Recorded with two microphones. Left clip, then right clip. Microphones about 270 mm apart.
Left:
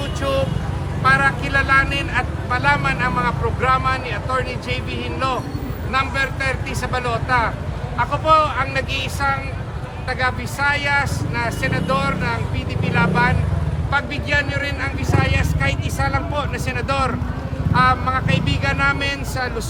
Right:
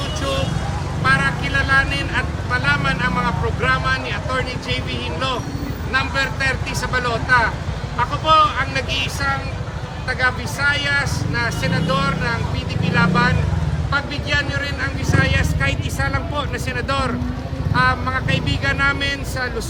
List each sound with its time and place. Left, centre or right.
1.0 s speech: centre
5.9 s speech: centre